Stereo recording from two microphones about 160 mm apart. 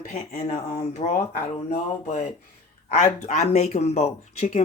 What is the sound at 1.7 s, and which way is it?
Speech, 55° left (ahead or behind).